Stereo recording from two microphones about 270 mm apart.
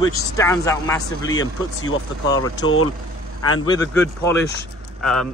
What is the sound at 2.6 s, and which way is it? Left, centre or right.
Speech, left.